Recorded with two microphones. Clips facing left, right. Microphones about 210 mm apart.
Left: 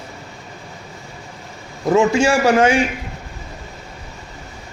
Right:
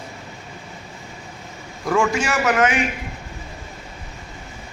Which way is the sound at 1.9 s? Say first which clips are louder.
Left 6 dB; 25° left (ahead or behind).